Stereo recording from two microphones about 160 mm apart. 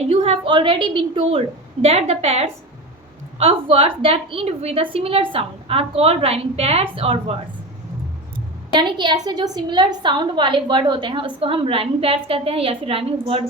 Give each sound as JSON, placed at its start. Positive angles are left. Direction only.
{"t": 0.1, "sound": "a woman's voice", "side_deg": -35}
{"t": 8.7, "sound": "a woman's voice", "side_deg": -30}